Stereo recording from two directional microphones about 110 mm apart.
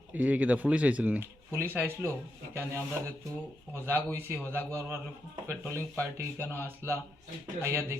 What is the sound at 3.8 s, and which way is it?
Speech, 20° right (ahead or behind).